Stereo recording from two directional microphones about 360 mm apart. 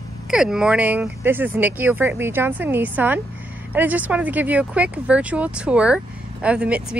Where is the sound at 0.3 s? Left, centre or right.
Centre.